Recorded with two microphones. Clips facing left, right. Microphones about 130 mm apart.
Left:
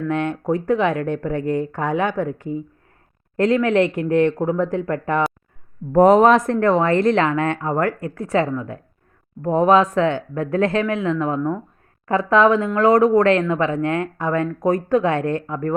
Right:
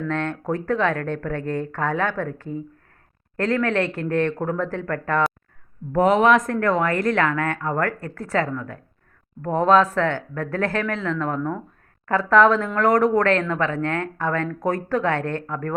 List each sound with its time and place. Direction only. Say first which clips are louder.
0.1 s speech: left 5 dB; 15° left (ahead or behind)
5.9 s speech: left 5 dB; 40° left (ahead or behind); by 15.7 s 15° left (ahead or behind)